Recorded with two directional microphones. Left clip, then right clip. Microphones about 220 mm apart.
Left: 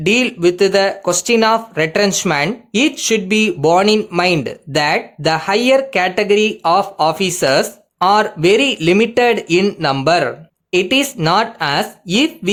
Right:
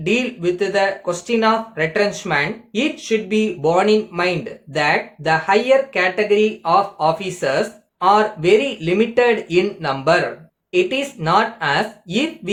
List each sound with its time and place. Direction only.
0.0 s speech: 50° left (ahead or behind)